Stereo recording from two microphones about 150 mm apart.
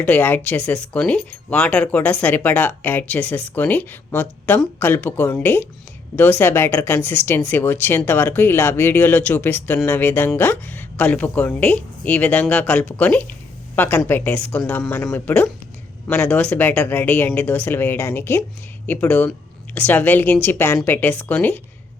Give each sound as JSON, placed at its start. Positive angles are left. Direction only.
{"t": 0.0, "sound": "a man's voice", "side_deg": 10}